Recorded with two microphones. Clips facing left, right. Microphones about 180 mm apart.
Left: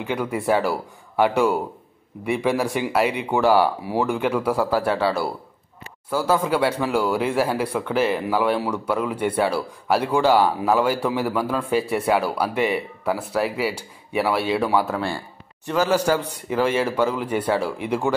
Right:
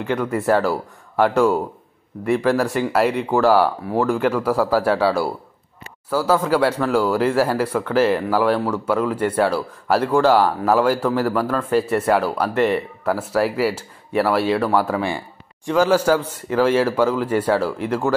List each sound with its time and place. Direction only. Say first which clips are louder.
0.0 s speech: right 3 dB; 5° left (ahead or behind)
15.0 s a man's voice: right 3 dB; 15° right (ahead or behind)
15.6 s a man's voice: right 4 dB; 10° left (ahead or behind)
15.9 s a man's voice: right 3 dB; 5° right (ahead or behind)